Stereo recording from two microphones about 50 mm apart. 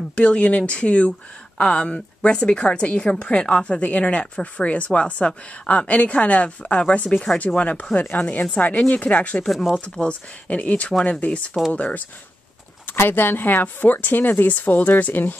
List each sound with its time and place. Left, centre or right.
0.1 s a woman's voice: left
8.0 s a woman's voice: left
9.5 s speech: centre
10.0 s a woman's voice: left
12.9 s speech: left